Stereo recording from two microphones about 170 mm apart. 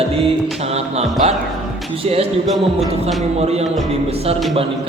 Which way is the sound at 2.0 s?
40° right (ahead or behind).